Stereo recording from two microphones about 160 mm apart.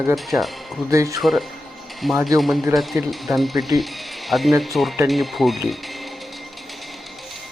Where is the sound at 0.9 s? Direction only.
20° right (ahead or behind).